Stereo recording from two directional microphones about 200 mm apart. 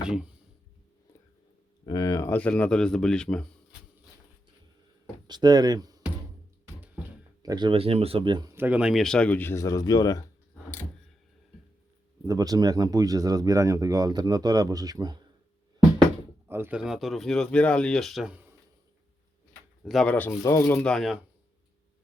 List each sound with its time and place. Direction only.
0.0 s speech: 5° right (ahead or behind)
1.8 s speech: 20° left (ahead or behind); by 3.8 s 5° left (ahead or behind)
5.3 s speech: 20° right (ahead or behind)
7.4 s speech: 20° right (ahead or behind)
8.5 s speech: 10° right (ahead or behind); by 10.2 s 20° left (ahead or behind)
12.2 s speech: 20° right (ahead or behind)
16.5 s speech: 10° right (ahead or behind)
19.8 s speech: centre (ahead or behind)